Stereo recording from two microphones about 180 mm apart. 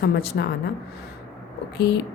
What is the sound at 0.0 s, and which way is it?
Speech, 60° left (ahead or behind).